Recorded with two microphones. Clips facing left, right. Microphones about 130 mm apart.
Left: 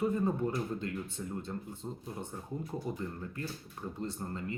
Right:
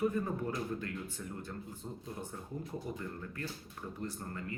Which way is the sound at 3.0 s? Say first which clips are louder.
Left 2 dB; 25° left (ahead or behind).